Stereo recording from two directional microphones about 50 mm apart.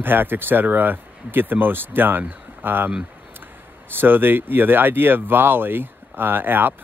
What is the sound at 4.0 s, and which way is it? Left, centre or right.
Speech, right.